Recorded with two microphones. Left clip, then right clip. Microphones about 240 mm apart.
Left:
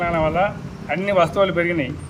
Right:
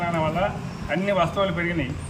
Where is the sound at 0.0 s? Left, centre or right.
Centre.